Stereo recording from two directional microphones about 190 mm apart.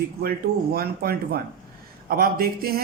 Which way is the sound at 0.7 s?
55° right (ahead or behind).